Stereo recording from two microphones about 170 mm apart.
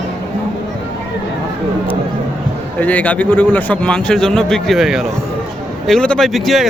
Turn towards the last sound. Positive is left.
turn(degrees=0)  # may be behind; listen again after turning